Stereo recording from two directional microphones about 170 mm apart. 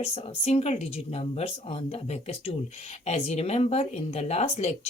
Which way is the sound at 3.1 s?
40° left (ahead or behind).